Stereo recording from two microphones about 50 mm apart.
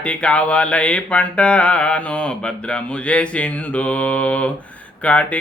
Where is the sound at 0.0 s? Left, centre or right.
Left.